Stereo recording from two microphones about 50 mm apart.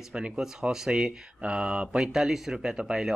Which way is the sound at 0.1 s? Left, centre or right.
Centre.